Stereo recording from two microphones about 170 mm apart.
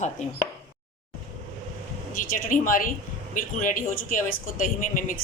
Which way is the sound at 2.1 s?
55° left (ahead or behind).